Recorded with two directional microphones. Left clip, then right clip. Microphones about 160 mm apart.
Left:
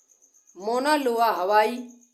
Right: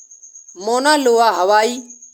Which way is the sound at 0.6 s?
35° right (ahead or behind).